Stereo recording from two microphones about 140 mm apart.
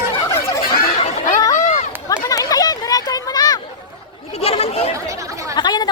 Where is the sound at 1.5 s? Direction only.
55° left (ahead or behind).